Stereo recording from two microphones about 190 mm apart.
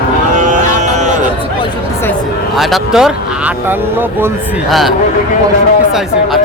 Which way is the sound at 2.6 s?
Centre (ahead or behind).